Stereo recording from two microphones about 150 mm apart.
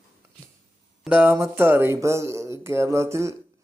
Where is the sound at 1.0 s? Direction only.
10° right (ahead or behind).